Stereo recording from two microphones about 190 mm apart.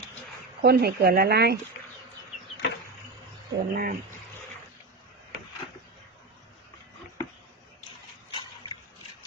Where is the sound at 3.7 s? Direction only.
50° right (ahead or behind).